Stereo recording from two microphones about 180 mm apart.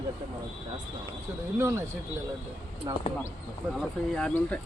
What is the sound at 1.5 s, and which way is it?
Speech, 15° right (ahead or behind).